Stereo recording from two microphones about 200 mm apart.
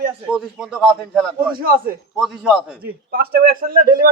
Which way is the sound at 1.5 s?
45° right (ahead or behind).